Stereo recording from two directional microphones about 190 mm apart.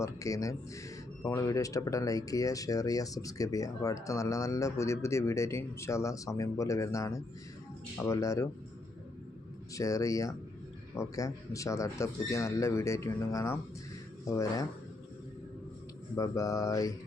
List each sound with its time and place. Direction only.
0.0 s speech: 15° left (ahead or behind)
9.7 s speech: 15° left (ahead or behind)
16.1 s speech: 15° left (ahead or behind)